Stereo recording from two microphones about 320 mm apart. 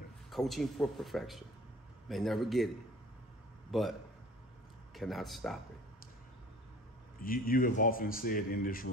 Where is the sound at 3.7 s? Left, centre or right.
Centre.